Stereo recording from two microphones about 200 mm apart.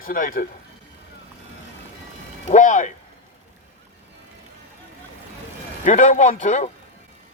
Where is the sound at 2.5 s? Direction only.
40° left (ahead or behind).